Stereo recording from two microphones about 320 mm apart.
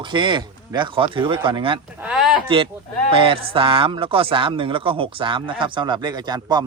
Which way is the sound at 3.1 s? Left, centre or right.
Centre.